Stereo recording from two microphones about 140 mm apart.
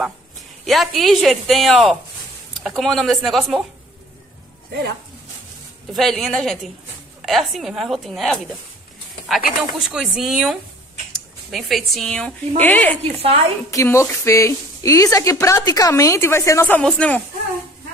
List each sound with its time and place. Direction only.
0.7 s speech: centre (ahead or behind)
5.9 s speech: centre (ahead or behind)
9.6 s speech: 5° right (ahead or behind); by 12.9 s 10° left (ahead or behind)
13.2 s a woman's voice: 45° right (ahead or behind)
13.7 s speech: 20° left (ahead or behind)